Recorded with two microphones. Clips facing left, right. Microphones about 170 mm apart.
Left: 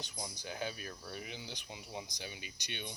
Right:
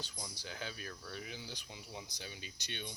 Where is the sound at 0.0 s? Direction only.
20° left (ahead or behind).